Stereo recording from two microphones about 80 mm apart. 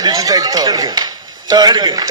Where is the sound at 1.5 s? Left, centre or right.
Right.